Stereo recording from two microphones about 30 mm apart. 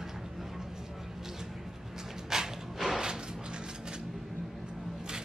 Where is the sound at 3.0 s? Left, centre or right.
Right.